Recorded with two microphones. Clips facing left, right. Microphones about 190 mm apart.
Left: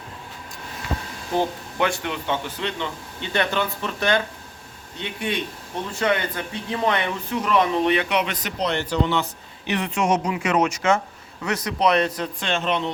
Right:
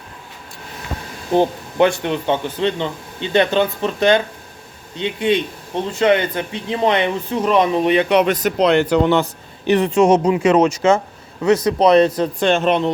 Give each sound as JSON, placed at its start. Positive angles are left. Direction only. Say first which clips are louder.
{"t": 1.3, "sound": "speech", "louder": "right 7 dB", "side_deg": -20}
{"t": 8.1, "sound": "speech", "louder": "right 9 dB", "side_deg": -45}
{"t": 8.5, "sound": "speech", "louder": "right 8 dB", "side_deg": -60}
{"t": 9.6, "sound": "a man's voice", "louder": "right 9 dB", "side_deg": -35}
{"t": 12.4, "sound": "speech", "louder": "right 8 dB", "side_deg": -50}